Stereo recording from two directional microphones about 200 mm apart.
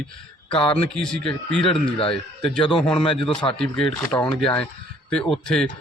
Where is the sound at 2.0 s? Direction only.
25° left (ahead or behind).